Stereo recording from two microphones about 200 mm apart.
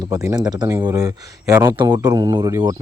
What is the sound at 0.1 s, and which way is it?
Speech, 15° right (ahead or behind).